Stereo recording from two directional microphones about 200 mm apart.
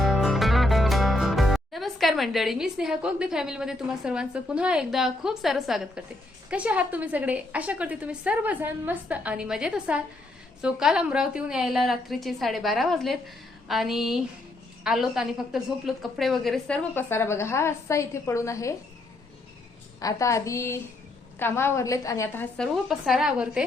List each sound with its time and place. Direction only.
0.0 s a woman's voice: centre (ahead or behind)
20.0 s a woman's voice: 15° left (ahead or behind)
22.5 s a woman's voice: centre (ahead or behind)